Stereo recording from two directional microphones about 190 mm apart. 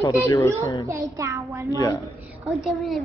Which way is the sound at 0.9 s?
15° right (ahead or behind).